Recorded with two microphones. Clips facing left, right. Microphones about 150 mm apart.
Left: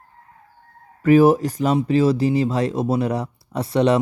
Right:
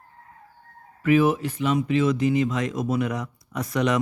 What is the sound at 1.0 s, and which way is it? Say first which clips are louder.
Speech: left 6 dB; 40° left (ahead or behind).